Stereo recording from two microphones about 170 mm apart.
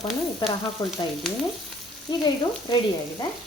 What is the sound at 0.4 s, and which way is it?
Frying, centre (ahead or behind).